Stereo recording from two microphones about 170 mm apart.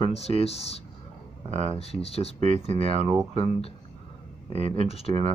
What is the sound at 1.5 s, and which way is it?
Speech, 40° right (ahead or behind).